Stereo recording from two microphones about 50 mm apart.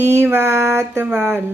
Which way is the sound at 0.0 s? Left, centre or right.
Right.